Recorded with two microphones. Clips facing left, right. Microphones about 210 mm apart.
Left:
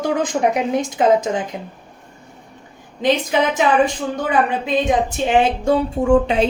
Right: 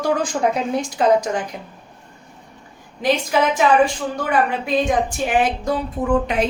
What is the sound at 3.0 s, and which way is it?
Speech, 20° left (ahead or behind).